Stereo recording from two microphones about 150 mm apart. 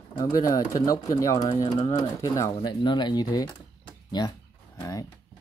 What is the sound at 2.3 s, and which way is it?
Speech, 25° left (ahead or behind).